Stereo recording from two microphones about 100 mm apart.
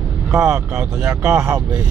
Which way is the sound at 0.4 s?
10° right (ahead or behind).